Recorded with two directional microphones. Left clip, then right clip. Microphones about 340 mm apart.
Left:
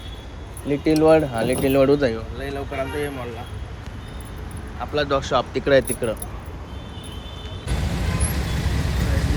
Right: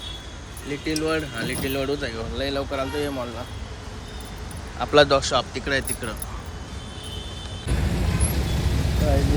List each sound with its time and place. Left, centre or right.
0.7 s speech: centre
2.4 s speech: centre
5.0 s speech: centre
7.7 s vehicle: centre